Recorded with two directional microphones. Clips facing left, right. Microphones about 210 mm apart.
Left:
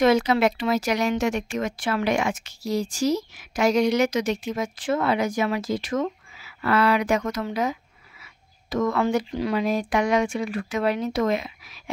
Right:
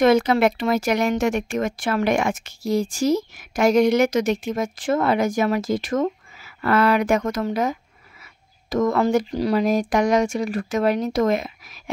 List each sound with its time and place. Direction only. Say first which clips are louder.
0.0 s speech: right 3 dB; 55° right (ahead or behind)